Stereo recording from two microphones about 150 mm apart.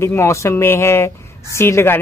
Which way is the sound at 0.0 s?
20° left (ahead or behind).